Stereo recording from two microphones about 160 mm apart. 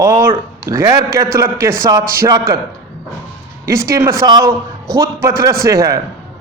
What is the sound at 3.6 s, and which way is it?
Speech, 20° right (ahead or behind).